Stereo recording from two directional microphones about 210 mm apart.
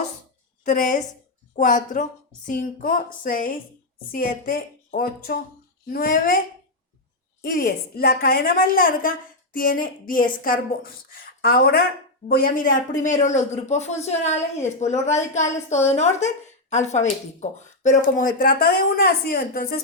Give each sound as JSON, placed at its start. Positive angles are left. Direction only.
{"t": 0.6, "sound": "a woman's voice", "side_deg": 40}
{"t": 7.5, "sound": "a woman's voice", "side_deg": 45}